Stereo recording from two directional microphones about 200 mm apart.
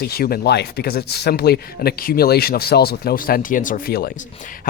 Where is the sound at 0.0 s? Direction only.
50° left (ahead or behind).